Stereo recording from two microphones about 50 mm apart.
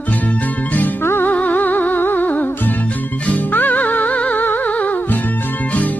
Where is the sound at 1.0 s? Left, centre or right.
Left.